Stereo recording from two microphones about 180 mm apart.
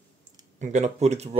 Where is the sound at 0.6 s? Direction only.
40° right (ahead or behind).